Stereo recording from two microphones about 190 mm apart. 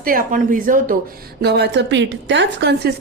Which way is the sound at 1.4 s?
60° right (ahead or behind).